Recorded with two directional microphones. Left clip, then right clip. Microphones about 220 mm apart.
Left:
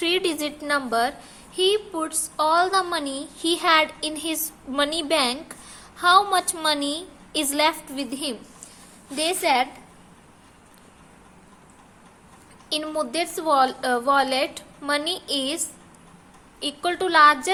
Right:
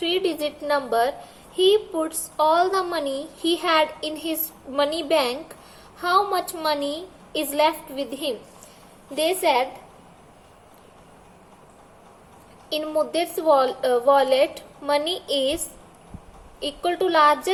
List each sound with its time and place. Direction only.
0.0 s a woman's voice: 25° left (ahead or behind)
12.7 s a woman's voice: 20° left (ahead or behind)
16.6 s a woman's voice: 15° left (ahead or behind)